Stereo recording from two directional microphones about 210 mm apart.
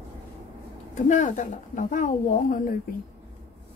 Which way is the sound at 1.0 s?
35° left (ahead or behind).